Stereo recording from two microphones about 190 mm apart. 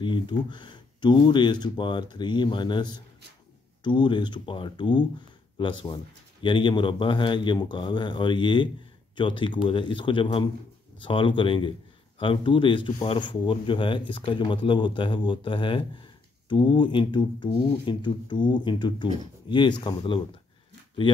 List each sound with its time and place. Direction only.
0.0 s speech: 25° left (ahead or behind)